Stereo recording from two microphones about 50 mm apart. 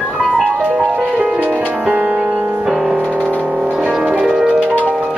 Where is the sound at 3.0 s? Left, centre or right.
Left.